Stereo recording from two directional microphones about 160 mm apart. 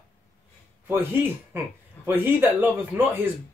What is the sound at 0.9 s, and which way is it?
Speech, 15° right (ahead or behind).